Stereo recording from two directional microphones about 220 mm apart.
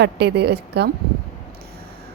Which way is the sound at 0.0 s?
50° right (ahead or behind).